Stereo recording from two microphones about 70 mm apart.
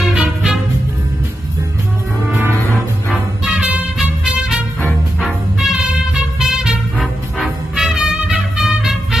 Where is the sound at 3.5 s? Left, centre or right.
Centre.